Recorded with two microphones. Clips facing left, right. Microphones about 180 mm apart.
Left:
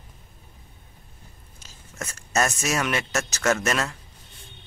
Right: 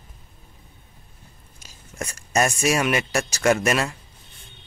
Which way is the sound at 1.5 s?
15° right (ahead or behind).